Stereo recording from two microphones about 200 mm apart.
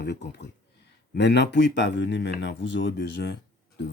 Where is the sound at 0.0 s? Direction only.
60° left (ahead or behind).